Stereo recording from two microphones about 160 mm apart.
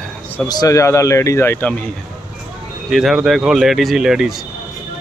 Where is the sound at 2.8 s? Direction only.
Centre (ahead or behind).